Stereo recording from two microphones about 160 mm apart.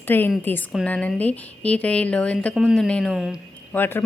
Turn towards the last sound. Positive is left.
turn(degrees=10)  # may be behind; listen again after turning